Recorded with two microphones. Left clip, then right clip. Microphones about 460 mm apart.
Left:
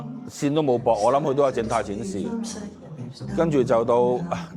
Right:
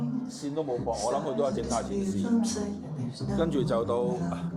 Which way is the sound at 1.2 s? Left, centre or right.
Left.